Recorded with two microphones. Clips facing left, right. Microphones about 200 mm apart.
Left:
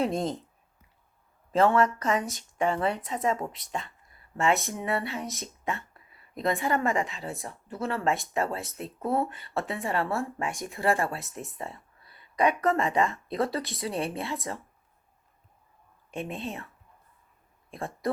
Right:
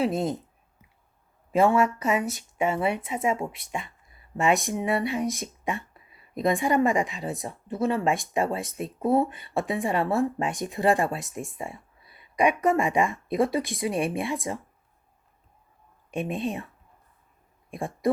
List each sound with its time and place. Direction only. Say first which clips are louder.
0.0 s speech: right 2 dB; 5° right (ahead or behind)
1.5 s speech: right 1 dB; 10° right (ahead or behind)
16.1 s speech: right 6 dB; 15° right (ahead or behind)
17.7 s speech: right 5 dB; 15° right (ahead or behind)